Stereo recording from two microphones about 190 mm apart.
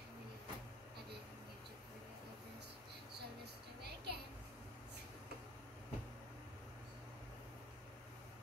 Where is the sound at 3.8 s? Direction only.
60° right (ahead or behind).